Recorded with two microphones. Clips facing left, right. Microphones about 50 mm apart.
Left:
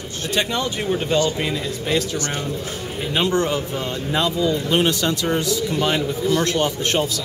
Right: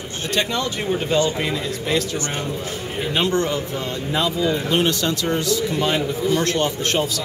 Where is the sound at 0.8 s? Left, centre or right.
Centre.